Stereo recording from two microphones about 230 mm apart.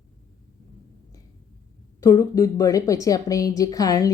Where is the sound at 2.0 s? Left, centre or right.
Centre.